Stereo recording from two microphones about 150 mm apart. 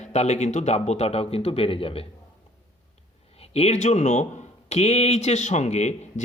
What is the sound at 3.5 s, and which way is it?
Speech, 45° left (ahead or behind).